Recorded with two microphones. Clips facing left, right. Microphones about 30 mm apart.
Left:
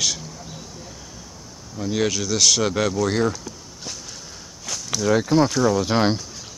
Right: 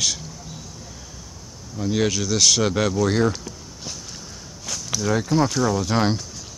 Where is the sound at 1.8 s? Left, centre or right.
Centre.